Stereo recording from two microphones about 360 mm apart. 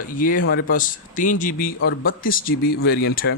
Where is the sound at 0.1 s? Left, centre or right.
Left.